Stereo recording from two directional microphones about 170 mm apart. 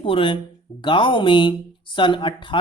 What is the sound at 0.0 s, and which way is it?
Speech, 30° left (ahead or behind).